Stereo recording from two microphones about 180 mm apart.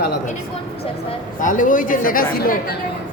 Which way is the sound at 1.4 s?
45° left (ahead or behind).